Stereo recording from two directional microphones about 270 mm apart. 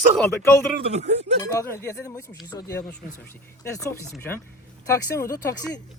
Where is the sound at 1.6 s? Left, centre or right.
Centre.